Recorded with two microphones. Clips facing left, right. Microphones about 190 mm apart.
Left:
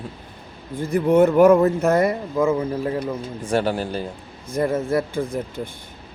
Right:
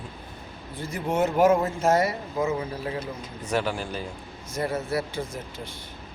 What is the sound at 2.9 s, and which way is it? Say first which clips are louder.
Speech: left 7 dB; 35° left (ahead or behind).